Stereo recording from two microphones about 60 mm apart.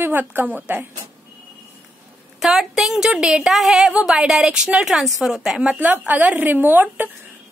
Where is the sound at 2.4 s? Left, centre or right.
Centre.